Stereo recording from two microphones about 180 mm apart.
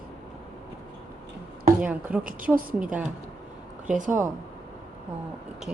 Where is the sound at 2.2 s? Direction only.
50° right (ahead or behind).